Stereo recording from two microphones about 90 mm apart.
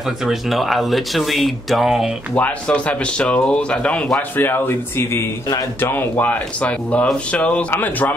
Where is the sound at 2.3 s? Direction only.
15° left (ahead or behind).